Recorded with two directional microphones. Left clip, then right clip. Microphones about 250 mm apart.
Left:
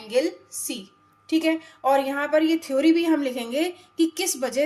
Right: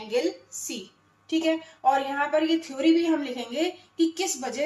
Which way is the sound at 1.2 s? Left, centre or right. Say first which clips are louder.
Left 2 dB; left.